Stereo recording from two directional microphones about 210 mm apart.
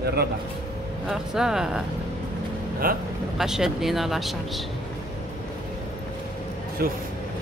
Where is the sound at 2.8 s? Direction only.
45° right (ahead or behind).